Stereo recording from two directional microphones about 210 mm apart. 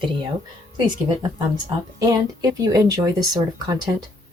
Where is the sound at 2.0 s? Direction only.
15° right (ahead or behind).